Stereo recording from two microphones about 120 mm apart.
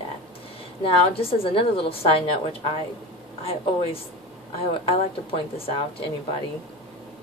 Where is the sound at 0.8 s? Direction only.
50° left (ahead or behind).